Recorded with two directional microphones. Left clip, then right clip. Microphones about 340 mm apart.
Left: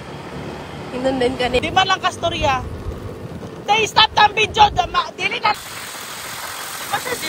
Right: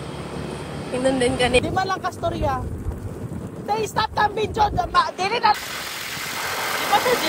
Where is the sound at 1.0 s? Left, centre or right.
Centre.